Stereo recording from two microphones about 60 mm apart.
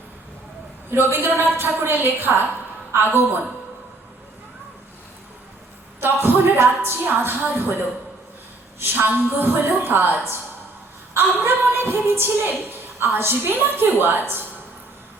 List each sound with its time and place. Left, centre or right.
0.9 s a woman's voice: right
6.0 s a woman's voice: right